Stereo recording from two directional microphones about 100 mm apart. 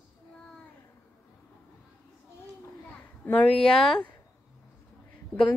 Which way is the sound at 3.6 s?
5° left (ahead or behind).